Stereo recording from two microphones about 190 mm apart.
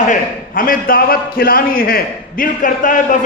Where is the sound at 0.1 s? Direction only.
45° left (ahead or behind).